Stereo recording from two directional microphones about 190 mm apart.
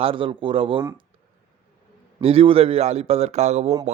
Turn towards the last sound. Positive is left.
turn(degrees=-35)  # may be behind; listen again after turning